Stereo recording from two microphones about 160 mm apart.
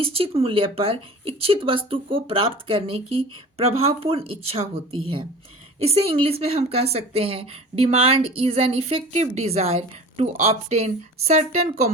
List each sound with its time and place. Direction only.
0.0 s speech: 35° right (ahead or behind)